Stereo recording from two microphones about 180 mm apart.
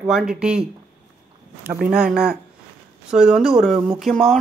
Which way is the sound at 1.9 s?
5° right (ahead or behind).